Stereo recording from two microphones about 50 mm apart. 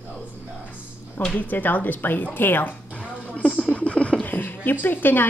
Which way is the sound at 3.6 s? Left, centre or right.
Left.